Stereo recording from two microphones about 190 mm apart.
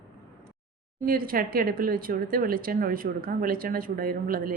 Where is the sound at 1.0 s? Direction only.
50° right (ahead or behind).